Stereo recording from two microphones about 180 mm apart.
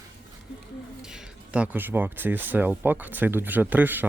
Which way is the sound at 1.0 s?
5° right (ahead or behind).